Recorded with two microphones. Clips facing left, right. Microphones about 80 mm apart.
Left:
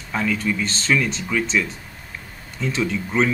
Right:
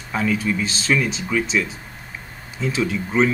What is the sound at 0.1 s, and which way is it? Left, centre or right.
Speech, centre.